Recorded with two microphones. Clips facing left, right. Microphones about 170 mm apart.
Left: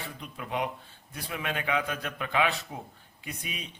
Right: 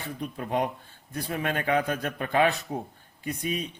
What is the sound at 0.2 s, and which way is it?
A man's voice, 45° right (ahead or behind).